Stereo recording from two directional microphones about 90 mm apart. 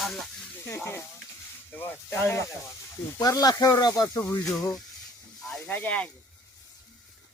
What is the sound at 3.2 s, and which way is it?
Speech, 45° left (ahead or behind).